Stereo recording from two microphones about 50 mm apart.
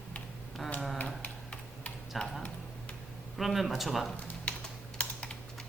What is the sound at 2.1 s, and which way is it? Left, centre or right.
Tick-tock, centre.